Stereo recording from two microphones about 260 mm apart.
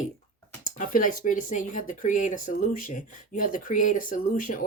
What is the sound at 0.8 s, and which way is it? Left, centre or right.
Speech, left.